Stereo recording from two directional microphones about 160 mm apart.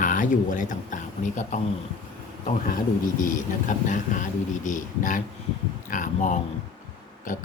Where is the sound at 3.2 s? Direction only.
55° left (ahead or behind).